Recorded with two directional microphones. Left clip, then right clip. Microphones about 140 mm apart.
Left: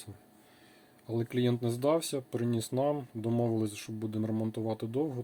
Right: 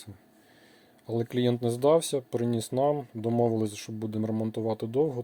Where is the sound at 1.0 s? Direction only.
35° right (ahead or behind).